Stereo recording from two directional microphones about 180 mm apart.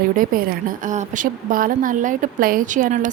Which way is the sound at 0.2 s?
50° right (ahead or behind).